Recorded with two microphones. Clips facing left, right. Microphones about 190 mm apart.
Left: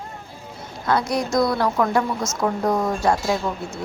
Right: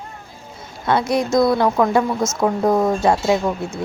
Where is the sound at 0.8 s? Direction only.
25° right (ahead or behind).